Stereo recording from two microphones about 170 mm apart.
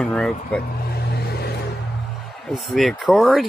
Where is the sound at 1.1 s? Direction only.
70° left (ahead or behind).